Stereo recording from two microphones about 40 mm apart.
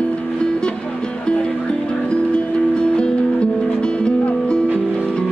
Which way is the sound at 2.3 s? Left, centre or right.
Left.